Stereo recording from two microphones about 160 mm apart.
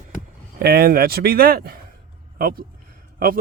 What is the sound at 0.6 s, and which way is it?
Speech, 70° right (ahead or behind).